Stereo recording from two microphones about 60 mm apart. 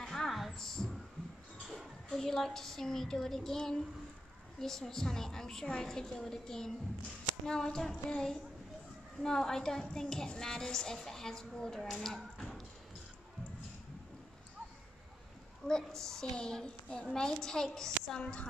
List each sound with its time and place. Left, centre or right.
0.0 s heart sounds: centre
0.3 s heart sounds: centre
0.6 s heart sounds: centre
1.7 s a woman's voice: centre
15.6 s a woman's voice: centre